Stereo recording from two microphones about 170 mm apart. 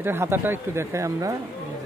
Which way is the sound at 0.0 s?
15° right (ahead or behind).